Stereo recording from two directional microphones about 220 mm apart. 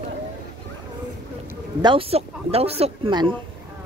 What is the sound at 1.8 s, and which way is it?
Speech, 25° right (ahead or behind).